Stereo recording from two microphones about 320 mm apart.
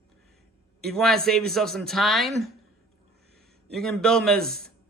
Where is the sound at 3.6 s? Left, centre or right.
Centre.